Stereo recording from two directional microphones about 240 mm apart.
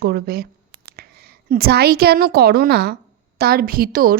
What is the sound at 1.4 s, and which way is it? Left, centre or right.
A woman's voice, right.